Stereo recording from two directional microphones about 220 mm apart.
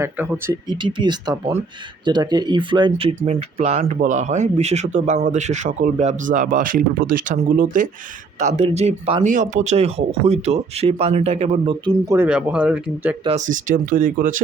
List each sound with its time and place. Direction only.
0.0 s speech: 10° right (ahead or behind)
0.8 s speech: 20° right (ahead or behind); by 13.1 s 5° right (ahead or behind)
13.2 s speech: 30° right (ahead or behind)